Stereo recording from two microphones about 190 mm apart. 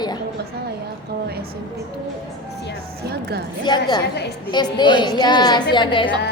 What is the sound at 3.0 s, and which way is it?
Speech, 55° right (ahead or behind).